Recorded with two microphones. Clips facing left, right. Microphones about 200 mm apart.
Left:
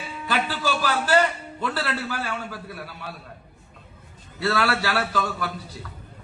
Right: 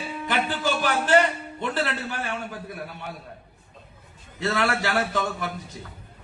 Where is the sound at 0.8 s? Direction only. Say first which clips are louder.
Right 1 dB; 20° right (ahead or behind).